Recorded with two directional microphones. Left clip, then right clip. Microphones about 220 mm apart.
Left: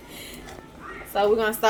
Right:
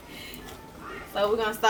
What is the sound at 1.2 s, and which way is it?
Laughter, 55° left (ahead or behind).